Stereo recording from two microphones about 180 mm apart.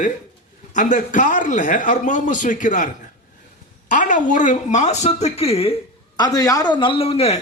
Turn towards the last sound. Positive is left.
turn(degrees=35)  # may be behind; listen again after turning